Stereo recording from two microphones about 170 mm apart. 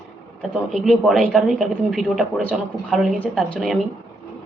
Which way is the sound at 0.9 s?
Centre (ahead or behind).